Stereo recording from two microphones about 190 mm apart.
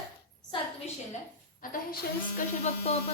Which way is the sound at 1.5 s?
45° left (ahead or behind).